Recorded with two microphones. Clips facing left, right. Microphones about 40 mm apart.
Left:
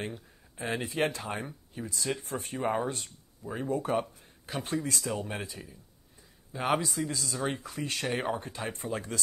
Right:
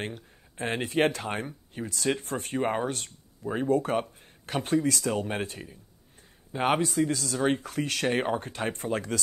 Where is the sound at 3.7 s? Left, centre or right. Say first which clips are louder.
Right 3 dB; right.